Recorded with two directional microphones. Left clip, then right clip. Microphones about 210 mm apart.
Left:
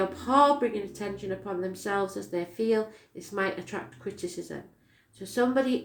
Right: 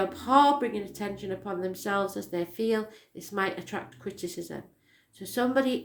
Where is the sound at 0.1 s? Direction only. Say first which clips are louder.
Right 1 dB; 40° right (ahead or behind).